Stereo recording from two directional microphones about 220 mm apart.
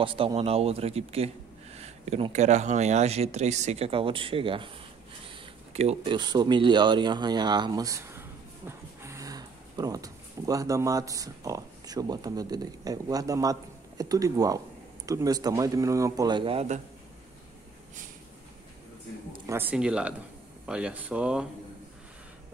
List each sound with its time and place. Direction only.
0.0 s a man's voice: 25° right (ahead or behind)
19.4 s speech: 10° right (ahead or behind)